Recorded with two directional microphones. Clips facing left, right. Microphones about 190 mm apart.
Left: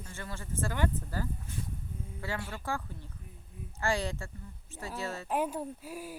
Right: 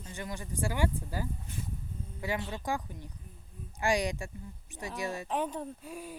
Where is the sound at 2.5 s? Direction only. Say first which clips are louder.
Right 2 dB; 15° right (ahead or behind).